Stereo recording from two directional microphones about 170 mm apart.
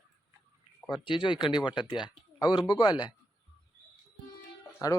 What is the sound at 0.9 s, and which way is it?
Speech, 25° left (ahead or behind).